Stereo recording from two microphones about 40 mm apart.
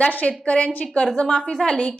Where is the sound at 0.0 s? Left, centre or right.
Left.